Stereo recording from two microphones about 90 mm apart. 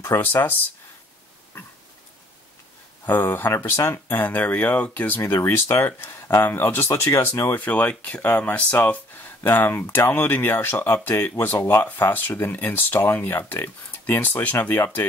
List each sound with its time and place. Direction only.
0.0 s speech: 25° left (ahead or behind)
3.1 s speech: 25° left (ahead or behind)